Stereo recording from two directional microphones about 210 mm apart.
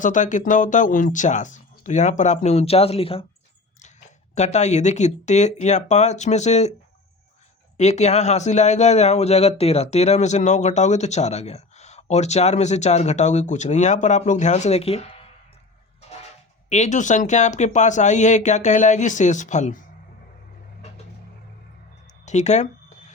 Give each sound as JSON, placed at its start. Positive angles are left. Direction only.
{"t": 0.0, "sound": "speech", "side_deg": 35}
{"t": 4.4, "sound": "speech", "side_deg": 35}
{"t": 7.8, "sound": "speech", "side_deg": 30}
{"t": 16.6, "sound": "speech", "side_deg": 35}
{"t": 22.3, "sound": "a sound", "side_deg": 35}